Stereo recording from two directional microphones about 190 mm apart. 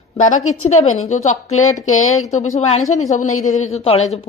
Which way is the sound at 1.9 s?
90° left.